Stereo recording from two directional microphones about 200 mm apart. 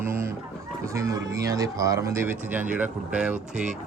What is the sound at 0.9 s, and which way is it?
Speech, 15° right (ahead or behind).